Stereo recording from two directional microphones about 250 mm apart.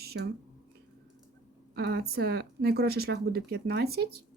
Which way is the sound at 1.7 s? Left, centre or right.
Right.